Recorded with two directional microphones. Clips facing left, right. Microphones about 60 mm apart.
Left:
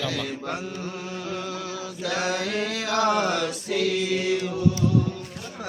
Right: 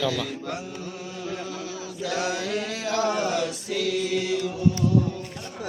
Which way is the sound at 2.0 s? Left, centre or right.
Left.